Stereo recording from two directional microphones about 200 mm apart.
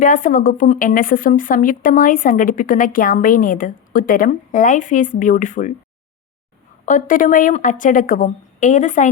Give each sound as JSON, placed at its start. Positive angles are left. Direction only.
{"t": 0.0, "sound": "a woman's voice", "side_deg": 40}
{"t": 6.8, "sound": "a woman's voice", "side_deg": 40}